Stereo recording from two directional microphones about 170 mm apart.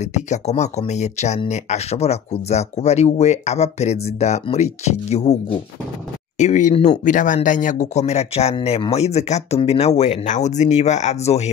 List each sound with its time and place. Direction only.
0.0 s speech: 45° left (ahead or behind)